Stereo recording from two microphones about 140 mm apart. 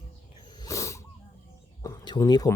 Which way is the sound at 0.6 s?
20° left (ahead or behind).